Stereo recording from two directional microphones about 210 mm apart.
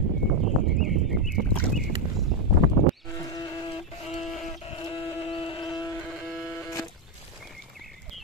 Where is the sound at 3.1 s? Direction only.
15° left (ahead or behind).